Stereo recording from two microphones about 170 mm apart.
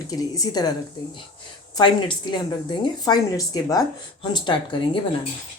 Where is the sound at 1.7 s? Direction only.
25° left (ahead or behind).